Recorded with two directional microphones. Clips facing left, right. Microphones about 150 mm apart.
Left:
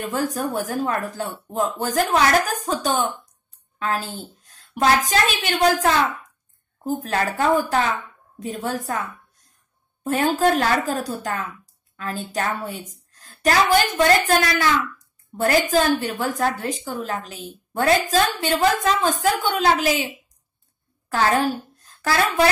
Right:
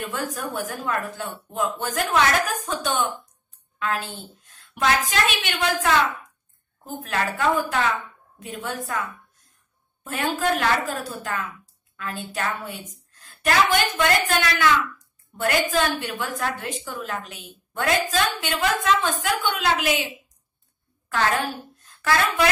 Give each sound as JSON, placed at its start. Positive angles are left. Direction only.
{"t": 0.0, "sound": "a woman's voice", "side_deg": 40}
{"t": 10.0, "sound": "a woman's voice", "side_deg": 40}
{"t": 21.1, "sound": "a woman's voice", "side_deg": 40}